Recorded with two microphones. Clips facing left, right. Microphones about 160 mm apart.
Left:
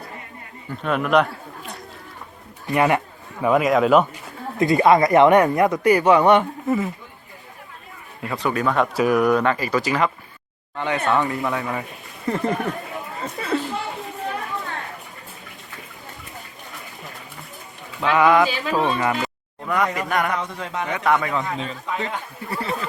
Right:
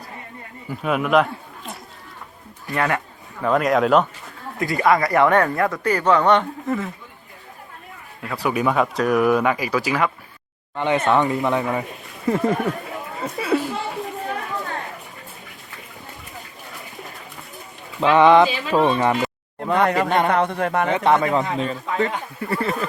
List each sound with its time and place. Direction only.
0.7 s a man's voice: 5° right (ahead or behind)
2.6 s speech: 20° left (ahead or behind)
3.4 s speech: 5° left (ahead or behind)
4.5 s speech: 20° left (ahead or behind)
8.2 s a man's voice: 5° right (ahead or behind)
10.8 s speech: 20° right (ahead or behind)
12.2 s speech: centre (ahead or behind)
13.1 s a sound: 5° right (ahead or behind)
18.0 s speech: 30° right (ahead or behind)
18.9 s a sound: 25° right (ahead or behind)
19.8 s speech: 70° right (ahead or behind)
20.1 s speech: 25° right (ahead or behind)
20.3 s speech: 60° right (ahead or behind)
20.9 s speech: 25° right (ahead or behind); by 22.7 s 60° right (ahead or behind)